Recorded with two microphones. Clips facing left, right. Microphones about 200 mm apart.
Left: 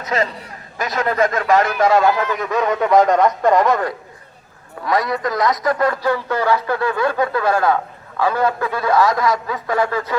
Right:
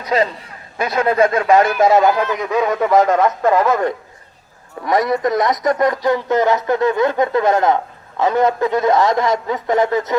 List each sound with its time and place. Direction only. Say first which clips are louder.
1.1 s speech: right 3 dB; 25° right (ahead or behind); by 3.8 s 5° right (ahead or behind)
4.9 s a man's voice: right 4 dB; 20° right (ahead or behind)